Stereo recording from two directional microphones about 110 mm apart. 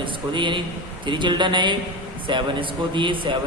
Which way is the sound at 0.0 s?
45° right (ahead or behind).